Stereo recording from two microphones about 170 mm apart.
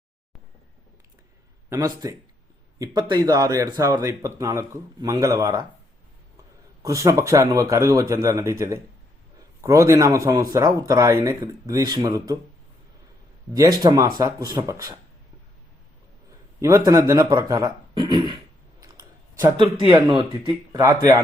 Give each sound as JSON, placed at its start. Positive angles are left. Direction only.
{"t": 1.7, "sound": "speech", "side_deg": -20}
{"t": 6.8, "sound": "speech", "side_deg": -20}
{"t": 13.5, "sound": "speech", "side_deg": -20}
{"t": 16.6, "sound": "speech", "side_deg": -15}
{"t": 18.8, "sound": "a sound", "side_deg": -20}
{"t": 20.5, "sound": "speech", "side_deg": -20}